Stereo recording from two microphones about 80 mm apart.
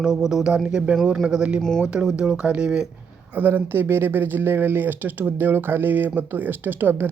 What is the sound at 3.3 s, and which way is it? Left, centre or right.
Speech, right.